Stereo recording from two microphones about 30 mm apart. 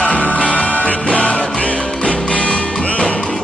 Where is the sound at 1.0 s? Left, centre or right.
Left.